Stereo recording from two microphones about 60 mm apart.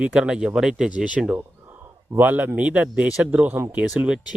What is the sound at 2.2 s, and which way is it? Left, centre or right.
Speech, right.